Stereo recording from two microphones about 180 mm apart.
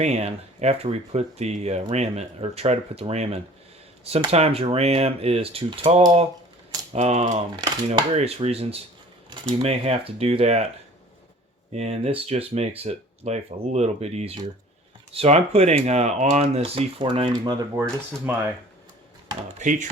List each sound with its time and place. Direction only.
0.0 s speech: 35° right (ahead or behind)
11.7 s speech: 35° right (ahead or behind)
19.5 s speech: 45° right (ahead or behind)